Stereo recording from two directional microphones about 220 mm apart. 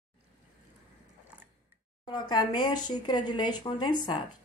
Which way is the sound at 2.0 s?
20° left (ahead or behind).